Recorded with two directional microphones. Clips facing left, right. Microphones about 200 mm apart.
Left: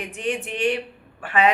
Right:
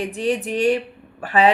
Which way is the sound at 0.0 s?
35° right (ahead or behind).